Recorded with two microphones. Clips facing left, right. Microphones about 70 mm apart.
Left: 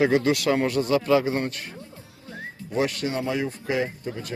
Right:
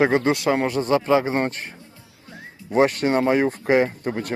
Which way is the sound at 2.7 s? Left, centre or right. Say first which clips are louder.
Right 7 dB; right.